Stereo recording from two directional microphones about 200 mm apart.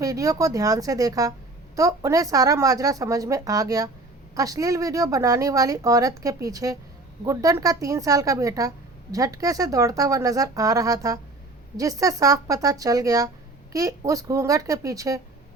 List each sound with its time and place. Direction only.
0.0 s a woman's voice: 15° right (ahead or behind)